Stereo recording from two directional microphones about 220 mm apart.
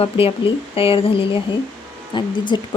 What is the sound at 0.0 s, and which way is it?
Speech, 25° left (ahead or behind).